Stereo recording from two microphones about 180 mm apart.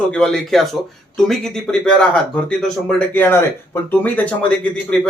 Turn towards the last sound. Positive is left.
turn(degrees=5)  # may be behind; listen again after turning